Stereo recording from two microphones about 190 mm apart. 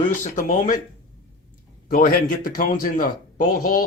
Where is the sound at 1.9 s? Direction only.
50° left (ahead or behind).